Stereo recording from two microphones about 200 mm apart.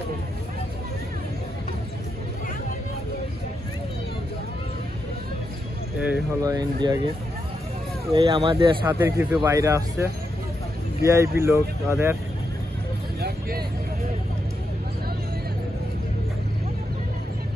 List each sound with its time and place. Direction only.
5.9 s speech: 5° right (ahead or behind)
6.4 s speech: 20° right (ahead or behind)
8.1 s speech: 25° right (ahead or behind)
8.8 s speech: 10° right (ahead or behind)
13.2 s vehicle: 50° right (ahead or behind)